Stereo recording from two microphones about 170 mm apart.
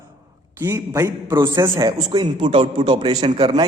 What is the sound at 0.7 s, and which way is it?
A man's voice, 15° right (ahead or behind).